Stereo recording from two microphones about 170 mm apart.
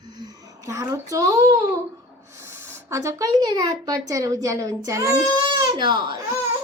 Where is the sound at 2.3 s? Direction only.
15° right (ahead or behind).